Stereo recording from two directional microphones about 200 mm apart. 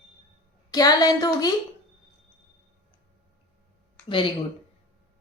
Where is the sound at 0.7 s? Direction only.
20° left (ahead or behind).